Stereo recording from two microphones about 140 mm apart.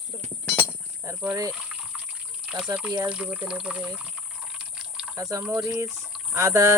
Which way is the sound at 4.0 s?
5° right (ahead or behind).